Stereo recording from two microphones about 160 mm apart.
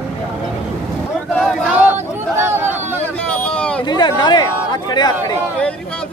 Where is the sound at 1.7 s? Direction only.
10° right (ahead or behind).